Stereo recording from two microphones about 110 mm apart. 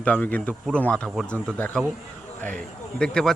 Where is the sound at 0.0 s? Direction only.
15° left (ahead or behind).